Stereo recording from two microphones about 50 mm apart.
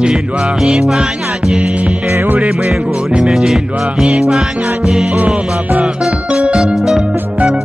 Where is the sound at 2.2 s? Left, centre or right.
Right.